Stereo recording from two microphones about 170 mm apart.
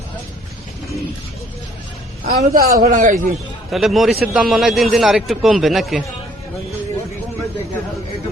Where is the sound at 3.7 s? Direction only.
Centre (ahead or behind).